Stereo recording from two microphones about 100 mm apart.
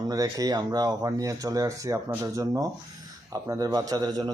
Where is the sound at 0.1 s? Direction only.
40° right (ahead or behind).